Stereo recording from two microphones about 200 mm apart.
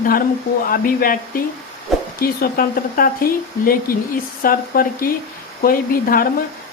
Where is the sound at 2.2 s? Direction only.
45° left (ahead or behind).